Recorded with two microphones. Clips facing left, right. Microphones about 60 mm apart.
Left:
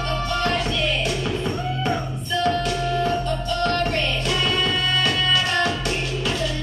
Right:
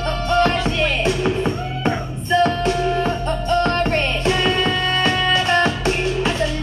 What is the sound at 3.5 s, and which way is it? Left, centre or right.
Music, right.